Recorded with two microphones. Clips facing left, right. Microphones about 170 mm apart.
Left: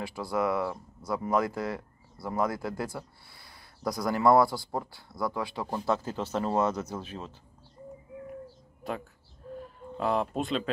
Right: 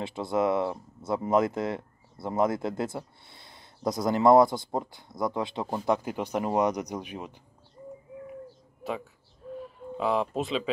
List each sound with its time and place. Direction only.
0.0 s speech: 25° right (ahead or behind)
8.8 s speech: centre (ahead or behind)